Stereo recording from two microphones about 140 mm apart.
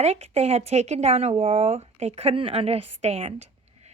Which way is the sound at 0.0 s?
50° right (ahead or behind).